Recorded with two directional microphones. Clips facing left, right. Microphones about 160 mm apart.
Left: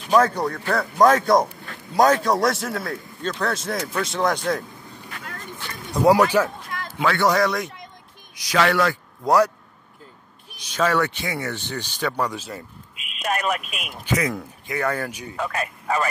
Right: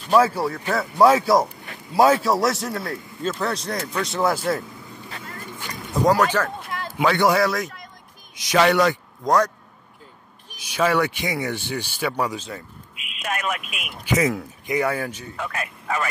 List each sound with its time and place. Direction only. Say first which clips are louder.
0.1 s a man's voice: even; 5° right (ahead or behind)
6.0 s speech: left 3 dB; 10° left (ahead or behind)
7.0 s speech: right 1 dB; 15° right (ahead or behind)
8.4 s a man's voice: right 2 dB; 20° right (ahead or behind)
9.2 s speech: left 2 dB; 10° left (ahead or behind)
10.6 s speech: right 1 dB; 10° right (ahead or behind)
13.0 s speech: left 3 dB; 35° left (ahead or behind)
14.0 s a man's voice: right 3 dB; 20° right (ahead or behind)
14.7 s speech: right 2 dB; 10° right (ahead or behind)
15.3 s speech: left 3 dB; 35° left (ahead or behind)